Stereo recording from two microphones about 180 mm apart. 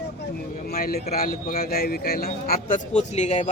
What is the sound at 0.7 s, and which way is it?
Speech, 55° left (ahead or behind).